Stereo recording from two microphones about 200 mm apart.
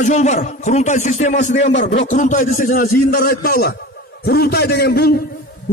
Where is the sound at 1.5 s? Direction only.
60° left (ahead or behind).